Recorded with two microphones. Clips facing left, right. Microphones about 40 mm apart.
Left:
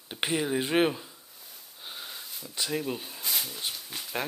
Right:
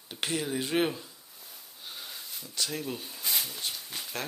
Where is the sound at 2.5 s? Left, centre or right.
Centre.